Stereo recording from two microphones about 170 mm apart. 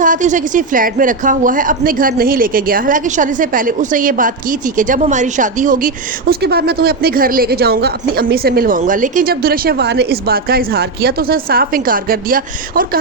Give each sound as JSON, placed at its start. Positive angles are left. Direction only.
{"t": 0.0, "sound": "a woman's voice", "side_deg": -50}